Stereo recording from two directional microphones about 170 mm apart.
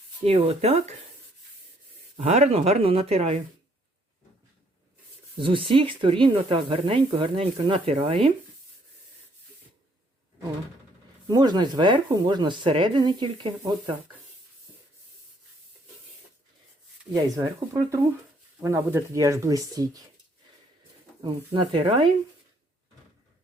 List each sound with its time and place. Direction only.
0.3 s speech: 35° right (ahead or behind)
2.1 s speech: 40° right (ahead or behind)
5.4 s speech: 30° right (ahead or behind)
11.3 s speech: 25° right (ahead or behind)
17.1 s speech: 20° right (ahead or behind)
21.2 s speech: 30° right (ahead or behind)